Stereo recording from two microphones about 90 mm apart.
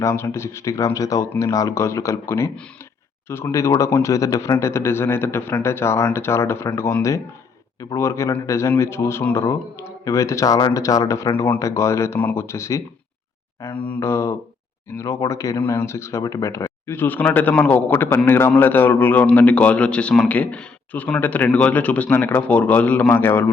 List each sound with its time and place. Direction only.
0.0 s speech: 30° left (ahead or behind)
13.7 s a man's voice: 15° left (ahead or behind)
14.0 s a man's voice: 30° left (ahead or behind)